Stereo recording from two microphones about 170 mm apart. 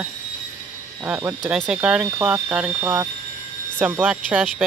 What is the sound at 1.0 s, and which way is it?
Speech, 10° right (ahead or behind).